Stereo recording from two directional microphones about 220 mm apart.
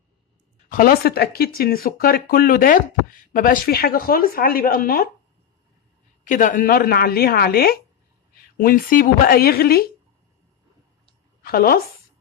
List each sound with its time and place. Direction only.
0.7 s speech: 40° left (ahead or behind)
6.2 s speech: 35° left (ahead or behind)
11.4 s speech: 40° left (ahead or behind)